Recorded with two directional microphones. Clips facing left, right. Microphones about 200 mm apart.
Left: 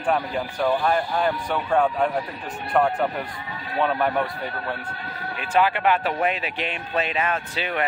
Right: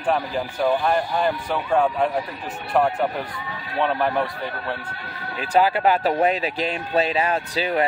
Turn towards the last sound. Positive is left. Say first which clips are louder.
# right 5 dB
turn(degrees=-35)  # may be behind; listen again after turning